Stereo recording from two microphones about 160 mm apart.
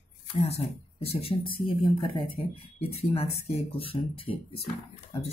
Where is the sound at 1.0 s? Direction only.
35° left (ahead or behind).